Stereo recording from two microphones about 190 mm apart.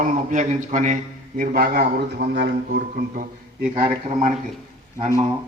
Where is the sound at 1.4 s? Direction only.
50° right (ahead or behind).